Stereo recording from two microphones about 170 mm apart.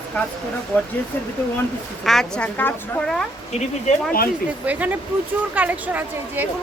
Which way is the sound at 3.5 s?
40° left (ahead or behind).